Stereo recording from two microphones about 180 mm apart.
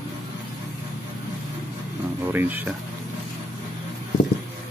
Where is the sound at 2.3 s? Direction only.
10° right (ahead or behind).